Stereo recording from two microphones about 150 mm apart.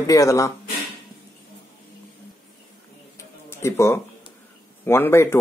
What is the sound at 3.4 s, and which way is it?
A man's voice, 20° left (ahead or behind).